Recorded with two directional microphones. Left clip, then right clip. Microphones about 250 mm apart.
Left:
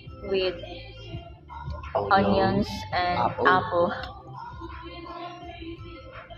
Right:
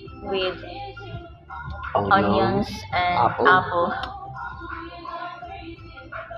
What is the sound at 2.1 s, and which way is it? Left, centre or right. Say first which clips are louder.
Speech: right 2 dB; centre.